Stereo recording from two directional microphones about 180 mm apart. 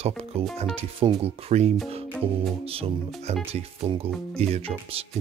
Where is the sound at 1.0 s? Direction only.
30° right (ahead or behind).